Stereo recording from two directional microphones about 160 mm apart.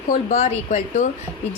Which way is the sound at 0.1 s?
55° left (ahead or behind).